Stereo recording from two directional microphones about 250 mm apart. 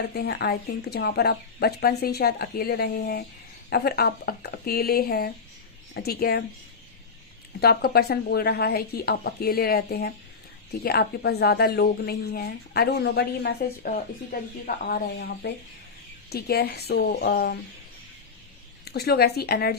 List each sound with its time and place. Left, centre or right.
0.1 s speech: left
7.6 s speech: left
18.9 s speech: left